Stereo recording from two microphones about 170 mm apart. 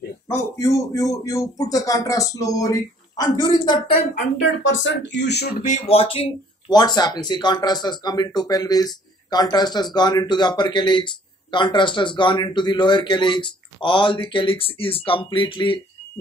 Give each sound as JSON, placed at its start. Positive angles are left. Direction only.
{"t": 0.3, "sound": "speech", "side_deg": 20}
{"t": 4.4, "sound": "speech", "side_deg": 90}
{"t": 5.6, "sound": "speech", "side_deg": 40}
{"t": 6.7, "sound": "speech", "side_deg": 25}